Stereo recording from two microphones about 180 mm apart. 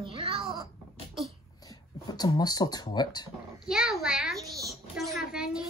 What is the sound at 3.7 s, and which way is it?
Speech, centre (ahead or behind).